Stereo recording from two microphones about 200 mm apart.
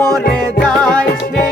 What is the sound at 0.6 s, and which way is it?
Music, 5° left (ahead or behind).